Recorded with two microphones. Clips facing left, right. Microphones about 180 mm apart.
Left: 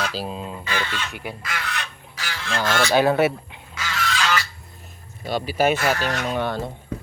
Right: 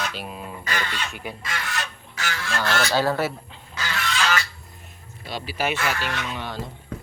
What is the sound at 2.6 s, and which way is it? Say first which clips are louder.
Fowl: left 4 dB; 20° left (ahead or behind).